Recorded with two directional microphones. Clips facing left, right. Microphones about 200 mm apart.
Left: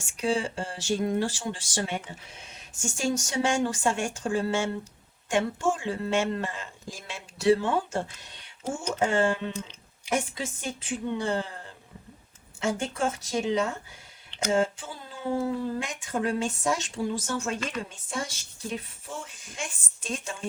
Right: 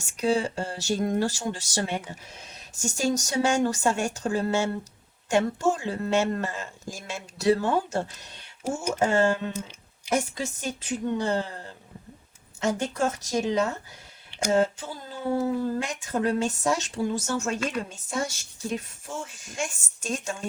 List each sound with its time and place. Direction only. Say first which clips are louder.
0.0 s speech: right 3 dB; 40° right (ahead or behind)
12.5 s a woman's voice: right 2 dB; 40° right (ahead or behind)